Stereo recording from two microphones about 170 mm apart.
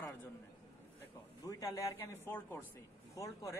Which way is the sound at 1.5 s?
20° left (ahead or behind).